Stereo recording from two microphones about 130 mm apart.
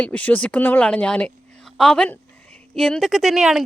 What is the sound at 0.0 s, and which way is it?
A woman's voice, 10° left (ahead or behind).